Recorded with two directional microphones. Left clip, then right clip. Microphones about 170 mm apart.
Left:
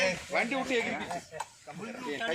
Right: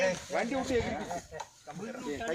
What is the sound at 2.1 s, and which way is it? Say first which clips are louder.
Speech: left 3 dB; 45° right (ahead or behind).